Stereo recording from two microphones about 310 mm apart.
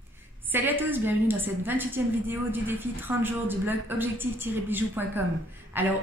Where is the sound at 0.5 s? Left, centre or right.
Centre.